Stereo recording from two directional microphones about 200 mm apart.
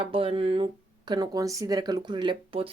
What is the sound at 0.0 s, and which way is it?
Speech, 30° right (ahead or behind).